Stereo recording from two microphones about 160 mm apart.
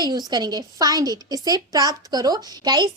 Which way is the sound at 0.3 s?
25° right (ahead or behind).